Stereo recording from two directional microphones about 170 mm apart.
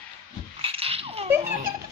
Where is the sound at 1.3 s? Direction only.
15° right (ahead or behind).